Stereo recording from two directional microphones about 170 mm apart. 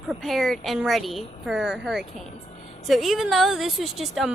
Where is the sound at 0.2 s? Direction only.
Centre (ahead or behind).